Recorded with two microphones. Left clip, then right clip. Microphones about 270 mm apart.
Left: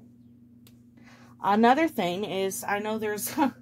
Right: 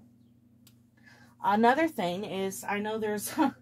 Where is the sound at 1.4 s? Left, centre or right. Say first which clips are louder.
Left 3 dB; left.